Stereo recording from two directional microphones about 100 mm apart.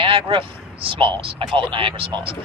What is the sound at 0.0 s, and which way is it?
Speech, 60° right (ahead or behind).